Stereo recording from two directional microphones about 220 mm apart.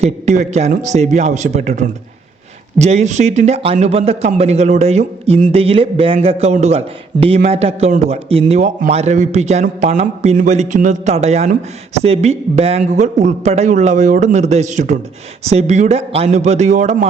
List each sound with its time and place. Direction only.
0.0 s a man's voice: 30° right (ahead or behind)